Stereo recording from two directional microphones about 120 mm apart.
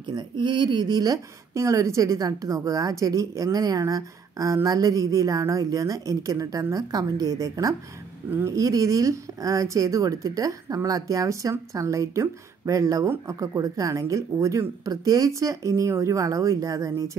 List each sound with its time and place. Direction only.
0.1 s speech: 40° right (ahead or behind)